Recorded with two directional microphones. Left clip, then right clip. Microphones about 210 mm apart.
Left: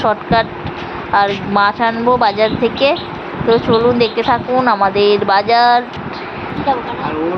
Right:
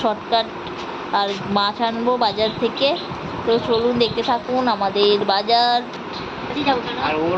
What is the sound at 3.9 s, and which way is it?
Speech, 15° left (ahead or behind).